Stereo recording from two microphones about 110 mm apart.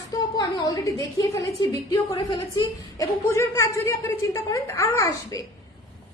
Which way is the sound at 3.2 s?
25° left (ahead or behind).